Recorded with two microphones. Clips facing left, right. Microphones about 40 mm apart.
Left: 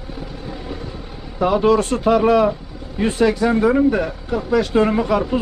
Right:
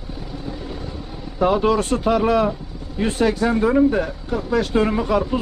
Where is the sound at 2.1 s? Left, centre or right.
Left.